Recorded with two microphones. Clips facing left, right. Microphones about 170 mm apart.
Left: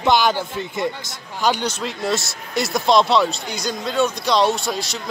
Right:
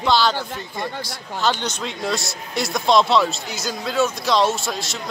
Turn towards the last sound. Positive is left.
turn(degrees=0)  # may be behind; listen again after turning